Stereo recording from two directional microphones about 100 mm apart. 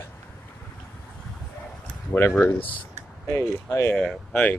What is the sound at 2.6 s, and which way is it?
Speech, 60° left (ahead or behind).